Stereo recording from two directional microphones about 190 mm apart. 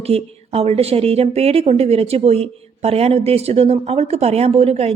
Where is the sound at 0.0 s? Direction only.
30° right (ahead or behind).